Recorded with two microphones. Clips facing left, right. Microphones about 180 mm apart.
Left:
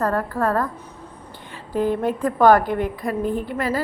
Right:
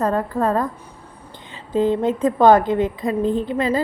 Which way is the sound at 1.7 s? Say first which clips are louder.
Right 3 dB; 20° right (ahead or behind).